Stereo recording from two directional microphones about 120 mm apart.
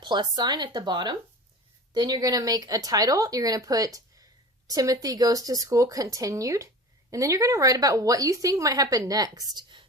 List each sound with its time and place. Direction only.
0.0 s speech: 40° right (ahead or behind)